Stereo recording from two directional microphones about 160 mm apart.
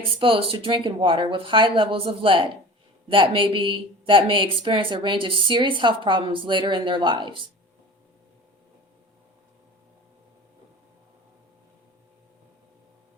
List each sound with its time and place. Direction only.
0.0 s speech: 35° right (ahead or behind)